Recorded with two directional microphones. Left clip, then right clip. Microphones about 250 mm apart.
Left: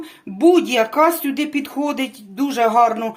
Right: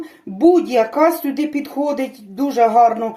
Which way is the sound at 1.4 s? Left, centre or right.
Left.